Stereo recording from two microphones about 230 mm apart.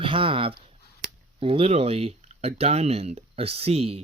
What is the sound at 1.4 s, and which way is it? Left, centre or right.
Speech, right.